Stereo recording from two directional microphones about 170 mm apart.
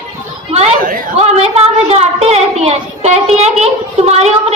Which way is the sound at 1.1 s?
40° right (ahead or behind).